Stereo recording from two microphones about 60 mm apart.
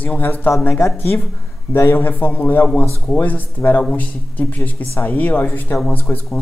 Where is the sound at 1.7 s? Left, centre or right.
Left.